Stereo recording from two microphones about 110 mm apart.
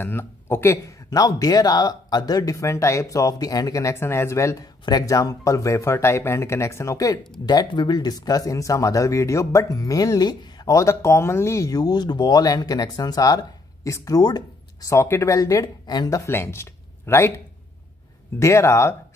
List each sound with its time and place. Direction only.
0.0 s speech: 20° left (ahead or behind)
7.4 s speech: 40° left (ahead or behind); by 17.3 s 25° left (ahead or behind)
18.4 s speech: 25° left (ahead or behind)